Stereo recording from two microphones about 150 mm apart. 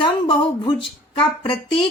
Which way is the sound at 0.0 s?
30° left (ahead or behind).